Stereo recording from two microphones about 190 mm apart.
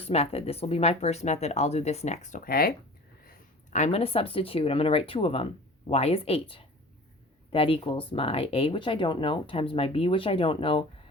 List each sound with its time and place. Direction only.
0.0 s speech: 30° left (ahead or behind); by 2.7 s 50° left (ahead or behind)
3.2 s speech: 40° left (ahead or behind)